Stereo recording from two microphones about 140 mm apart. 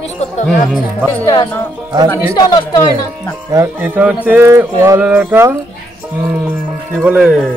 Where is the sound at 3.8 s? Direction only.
10° right (ahead or behind).